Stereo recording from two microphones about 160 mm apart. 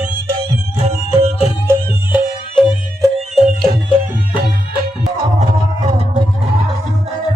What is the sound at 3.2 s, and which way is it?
Music, centre (ahead or behind).